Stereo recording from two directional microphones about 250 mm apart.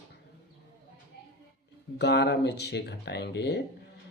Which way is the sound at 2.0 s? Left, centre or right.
Left.